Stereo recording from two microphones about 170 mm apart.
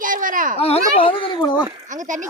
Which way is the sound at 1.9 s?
45° right (ahead or behind).